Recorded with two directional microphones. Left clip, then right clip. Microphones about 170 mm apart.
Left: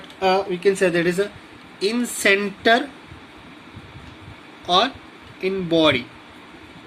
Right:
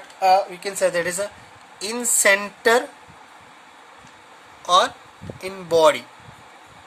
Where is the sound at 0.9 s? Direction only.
80° right.